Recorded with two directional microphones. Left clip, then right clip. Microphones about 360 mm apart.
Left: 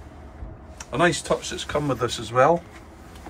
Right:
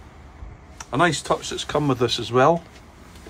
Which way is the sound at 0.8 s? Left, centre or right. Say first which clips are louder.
Right 1 dB; right.